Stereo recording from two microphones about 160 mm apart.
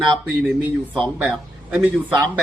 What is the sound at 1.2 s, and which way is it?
Speech, centre (ahead or behind).